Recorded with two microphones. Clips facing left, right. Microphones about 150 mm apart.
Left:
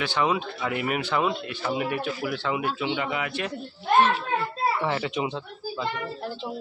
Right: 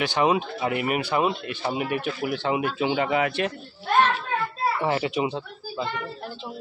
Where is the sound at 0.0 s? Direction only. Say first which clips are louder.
Right 3 dB; 15° right (ahead or behind).